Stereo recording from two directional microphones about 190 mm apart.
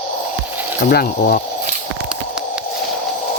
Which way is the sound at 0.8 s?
55° left (ahead or behind).